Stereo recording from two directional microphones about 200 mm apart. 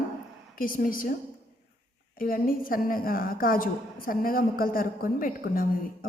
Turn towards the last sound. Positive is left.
turn(degrees=45)  # may be behind; listen again after turning